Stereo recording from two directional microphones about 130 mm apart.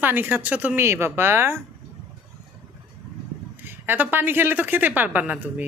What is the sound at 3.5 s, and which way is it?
A woman's voice, 15° right (ahead or behind).